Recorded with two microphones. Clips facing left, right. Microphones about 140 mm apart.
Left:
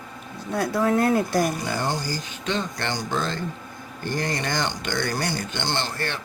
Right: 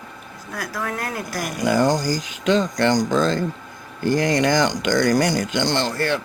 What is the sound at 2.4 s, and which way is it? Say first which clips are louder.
Speech: right 10 dB; 90° right.